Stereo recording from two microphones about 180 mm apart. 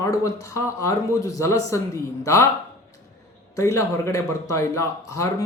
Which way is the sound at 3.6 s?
15° left (ahead or behind).